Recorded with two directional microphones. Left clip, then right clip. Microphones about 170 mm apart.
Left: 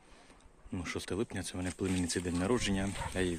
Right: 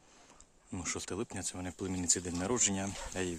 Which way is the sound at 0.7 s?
15° right (ahead or behind).